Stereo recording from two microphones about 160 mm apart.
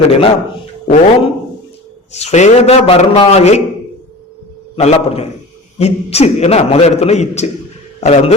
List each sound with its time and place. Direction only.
0.9 s a man's voice: 35° left (ahead or behind)
4.8 s a man's voice: 40° left (ahead or behind)